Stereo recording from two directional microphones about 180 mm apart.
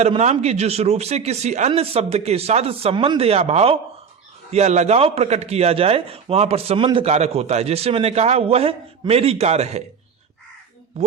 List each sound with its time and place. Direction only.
0.0 s a man's voice: 40° right (ahead or behind)
11.0 s a man's voice: 35° right (ahead or behind)